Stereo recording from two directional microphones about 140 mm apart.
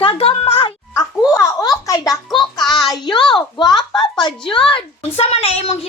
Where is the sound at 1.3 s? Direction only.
25° left (ahead or behind).